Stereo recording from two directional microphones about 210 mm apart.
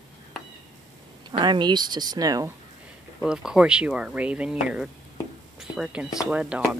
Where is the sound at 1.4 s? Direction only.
20° right (ahead or behind).